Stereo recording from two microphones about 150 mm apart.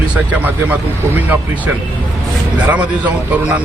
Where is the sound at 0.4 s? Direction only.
10° right (ahead or behind).